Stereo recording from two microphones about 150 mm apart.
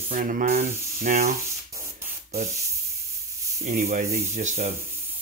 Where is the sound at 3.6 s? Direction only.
65° right (ahead or behind).